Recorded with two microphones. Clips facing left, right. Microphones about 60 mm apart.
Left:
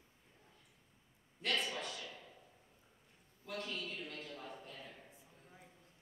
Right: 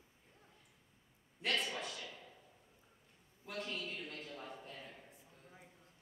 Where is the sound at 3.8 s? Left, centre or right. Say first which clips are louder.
Even; centre.